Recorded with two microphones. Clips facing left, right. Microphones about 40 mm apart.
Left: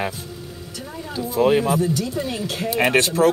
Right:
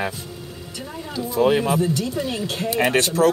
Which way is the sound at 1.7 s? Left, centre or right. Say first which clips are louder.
Even; centre.